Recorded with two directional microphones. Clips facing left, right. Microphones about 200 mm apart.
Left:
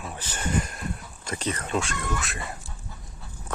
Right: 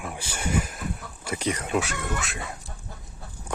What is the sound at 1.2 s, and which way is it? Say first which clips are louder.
Speech: right 2 dB; 10° right (ahead or behind).